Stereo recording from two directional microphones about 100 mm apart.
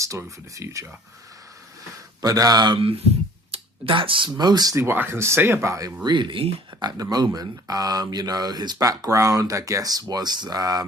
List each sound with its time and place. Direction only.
0.0 s speech: 30° right (ahead or behind)
2.2 s speech: 40° right (ahead or behind)
2.7 s speech: 65° right (ahead or behind); by 4.8 s 40° right (ahead or behind)
4.8 s speech: 25° right (ahead or behind)
6.0 s speech: 50° right (ahead or behind)